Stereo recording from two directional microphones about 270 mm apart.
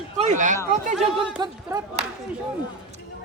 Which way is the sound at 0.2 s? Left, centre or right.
Right.